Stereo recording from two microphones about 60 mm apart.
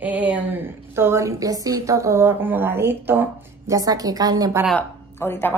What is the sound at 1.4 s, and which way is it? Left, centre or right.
Speech, right.